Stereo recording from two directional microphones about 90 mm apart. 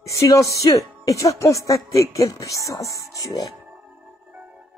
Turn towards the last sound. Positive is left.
turn(degrees=-15)  # may be behind; listen again after turning